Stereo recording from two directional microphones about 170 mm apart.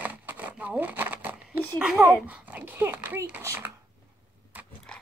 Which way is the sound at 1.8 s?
5° right (ahead or behind).